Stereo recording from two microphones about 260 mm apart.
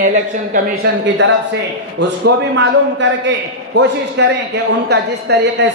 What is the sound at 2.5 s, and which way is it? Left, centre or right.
A man's voice, right.